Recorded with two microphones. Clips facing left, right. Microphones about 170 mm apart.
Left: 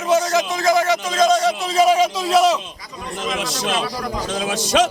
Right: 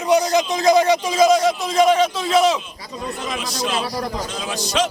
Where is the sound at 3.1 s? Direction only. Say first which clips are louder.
Left 6 dB; 90° left.